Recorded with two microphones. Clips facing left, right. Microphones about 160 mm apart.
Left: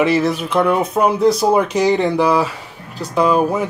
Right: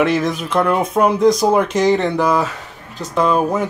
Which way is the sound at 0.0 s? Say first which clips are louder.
Left 1 dB; 5° left (ahead or behind).